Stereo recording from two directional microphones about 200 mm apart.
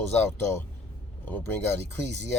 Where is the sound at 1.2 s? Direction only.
10° left (ahead or behind).